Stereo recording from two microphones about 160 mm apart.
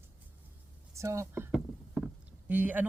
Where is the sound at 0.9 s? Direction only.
20° right (ahead or behind).